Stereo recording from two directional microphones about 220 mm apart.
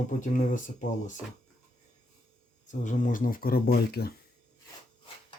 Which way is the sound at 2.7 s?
35° left (ahead or behind).